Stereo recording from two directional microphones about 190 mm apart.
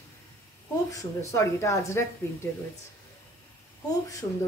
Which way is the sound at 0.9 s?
15° left (ahead or behind).